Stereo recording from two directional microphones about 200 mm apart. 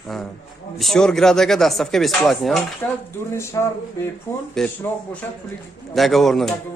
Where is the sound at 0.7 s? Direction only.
Centre (ahead or behind).